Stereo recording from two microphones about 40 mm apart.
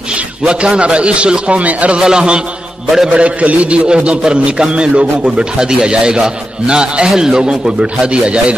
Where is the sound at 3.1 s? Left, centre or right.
Right.